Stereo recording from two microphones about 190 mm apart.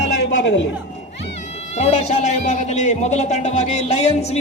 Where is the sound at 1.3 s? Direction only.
35° left (ahead or behind).